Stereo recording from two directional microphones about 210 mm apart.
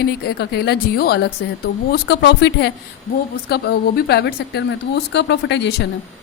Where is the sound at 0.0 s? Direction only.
50° left (ahead or behind).